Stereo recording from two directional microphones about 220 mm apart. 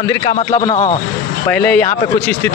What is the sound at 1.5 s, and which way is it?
Speech, 5° left (ahead or behind).